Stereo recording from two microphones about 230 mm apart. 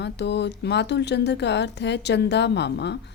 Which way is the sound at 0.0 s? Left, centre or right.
Left.